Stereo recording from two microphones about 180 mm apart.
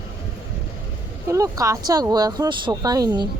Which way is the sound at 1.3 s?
20° right (ahead or behind).